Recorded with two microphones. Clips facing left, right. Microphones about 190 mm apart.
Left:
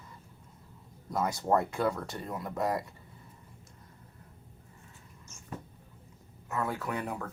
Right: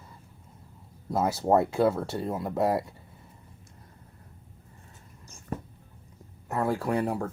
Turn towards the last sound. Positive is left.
turn(degrees=-35)  # may be behind; listen again after turning